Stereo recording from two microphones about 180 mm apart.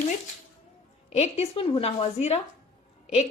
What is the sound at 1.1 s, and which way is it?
A woman's voice, 35° left (ahead or behind).